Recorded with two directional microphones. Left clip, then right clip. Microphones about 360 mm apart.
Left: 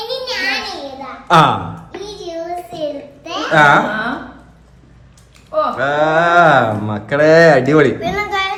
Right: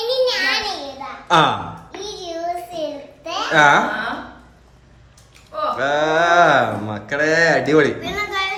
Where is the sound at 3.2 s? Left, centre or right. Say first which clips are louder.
Left 3 dB; centre.